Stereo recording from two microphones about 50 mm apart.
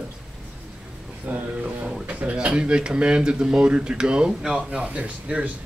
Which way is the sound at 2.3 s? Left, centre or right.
Right.